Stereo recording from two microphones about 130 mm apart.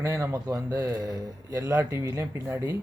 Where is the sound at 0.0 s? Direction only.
20° right (ahead or behind).